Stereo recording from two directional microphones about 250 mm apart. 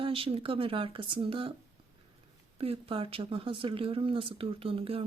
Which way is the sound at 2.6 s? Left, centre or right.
Right.